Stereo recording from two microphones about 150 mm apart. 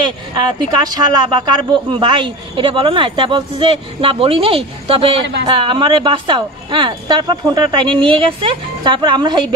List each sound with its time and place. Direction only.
0.0 s a man's voice: 30° right (ahead or behind)